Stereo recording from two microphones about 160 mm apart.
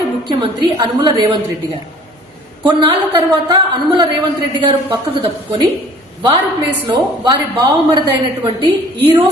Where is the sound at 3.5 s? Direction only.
25° right (ahead or behind).